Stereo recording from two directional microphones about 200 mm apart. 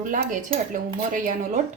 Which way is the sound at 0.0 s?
40° right (ahead or behind).